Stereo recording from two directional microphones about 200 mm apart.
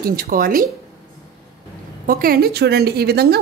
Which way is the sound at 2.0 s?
45° right (ahead or behind).